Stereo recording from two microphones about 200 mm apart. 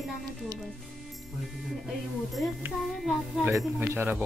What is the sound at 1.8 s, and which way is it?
A woman's voice, centre (ahead or behind).